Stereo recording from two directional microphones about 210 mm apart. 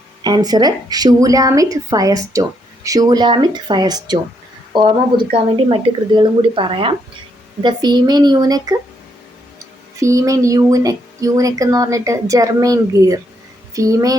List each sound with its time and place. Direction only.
0.2 s a woman's voice: 20° right (ahead or behind)
10.0 s speech: 15° right (ahead or behind)